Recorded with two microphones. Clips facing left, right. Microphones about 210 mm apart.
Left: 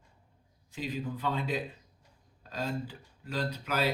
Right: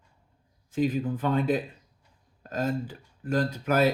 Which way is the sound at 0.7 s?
50° right (ahead or behind).